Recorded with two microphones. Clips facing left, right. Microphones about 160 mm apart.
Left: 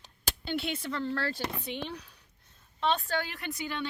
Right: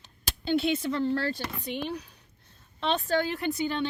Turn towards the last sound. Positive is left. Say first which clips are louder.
# right 7 dB
turn(degrees=-30)  # may be behind; listen again after turning